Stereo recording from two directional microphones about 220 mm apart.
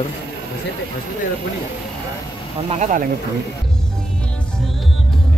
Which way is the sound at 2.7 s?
35° right (ahead or behind).